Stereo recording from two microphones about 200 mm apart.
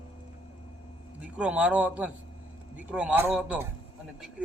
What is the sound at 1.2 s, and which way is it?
A man's voice, 5° right (ahead or behind).